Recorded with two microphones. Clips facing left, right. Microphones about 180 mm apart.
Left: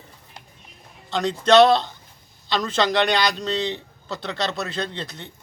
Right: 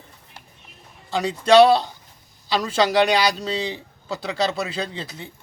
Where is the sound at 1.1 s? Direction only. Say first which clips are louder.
Right 1 dB; 10° right (ahead or behind).